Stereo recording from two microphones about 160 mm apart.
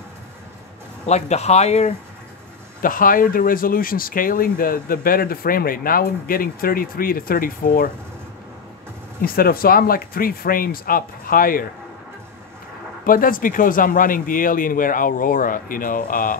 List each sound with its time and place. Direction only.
1.0 s speech: 45° left (ahead or behind)
2.8 s speech: 60° left (ahead or behind)
9.2 s speech: 65° left (ahead or behind)
13.0 s speech: 60° left (ahead or behind)